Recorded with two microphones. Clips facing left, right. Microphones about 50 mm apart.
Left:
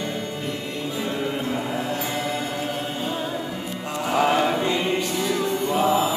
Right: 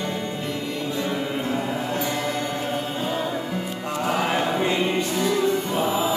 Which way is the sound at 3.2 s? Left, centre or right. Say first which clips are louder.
Right 2 dB; centre.